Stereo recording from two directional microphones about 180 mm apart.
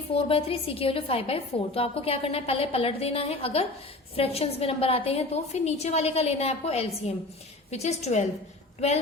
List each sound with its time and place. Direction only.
0.1 s a woman's voice: 30° left (ahead or behind)